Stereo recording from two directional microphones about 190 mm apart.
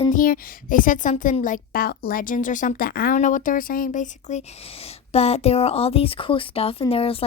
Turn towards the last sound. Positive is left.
turn(degrees=30)  # may be behind; listen again after turning